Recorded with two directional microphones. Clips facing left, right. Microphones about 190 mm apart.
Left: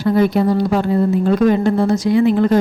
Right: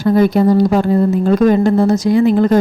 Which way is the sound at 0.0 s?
40° right (ahead or behind).